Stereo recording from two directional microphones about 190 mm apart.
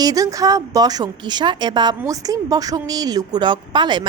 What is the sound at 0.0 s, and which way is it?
Speech, 20° right (ahead or behind).